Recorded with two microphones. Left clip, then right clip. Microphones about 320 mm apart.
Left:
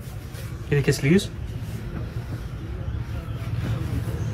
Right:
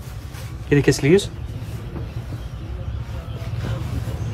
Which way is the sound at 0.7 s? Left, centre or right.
Right.